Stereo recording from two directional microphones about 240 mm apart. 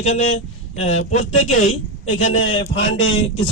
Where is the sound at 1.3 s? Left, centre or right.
Left.